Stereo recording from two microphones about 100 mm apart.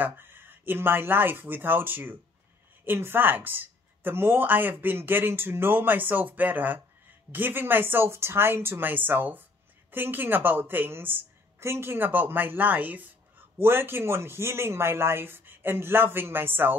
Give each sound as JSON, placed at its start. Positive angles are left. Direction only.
{"t": 0.0, "sound": "a woman's voice", "side_deg": -20}